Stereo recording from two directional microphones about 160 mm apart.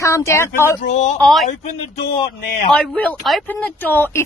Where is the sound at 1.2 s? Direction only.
Centre (ahead or behind).